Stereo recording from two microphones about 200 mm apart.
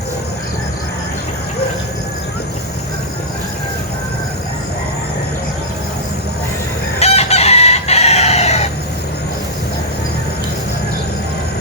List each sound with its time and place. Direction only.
7.0 s chicken: 30° left (ahead or behind)